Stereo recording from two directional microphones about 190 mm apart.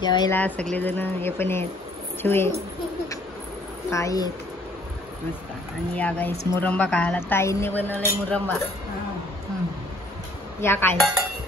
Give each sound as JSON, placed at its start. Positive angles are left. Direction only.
{"t": 0.0, "sound": "speech", "side_deg": 25}
{"t": 0.3, "sound": "a man's voice", "side_deg": 10}
{"t": 3.9, "sound": "a man's voice", "side_deg": 15}
{"t": 5.9, "sound": "a man's voice", "side_deg": 10}
{"t": 10.6, "sound": "a man's voice", "side_deg": 10}
{"t": 11.0, "sound": "dishes", "side_deg": 0}